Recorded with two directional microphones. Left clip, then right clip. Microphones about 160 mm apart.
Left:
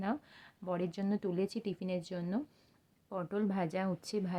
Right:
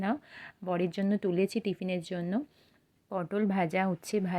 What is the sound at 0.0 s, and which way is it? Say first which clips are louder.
A woman's voice: right 5 dB; 20° right (ahead or behind).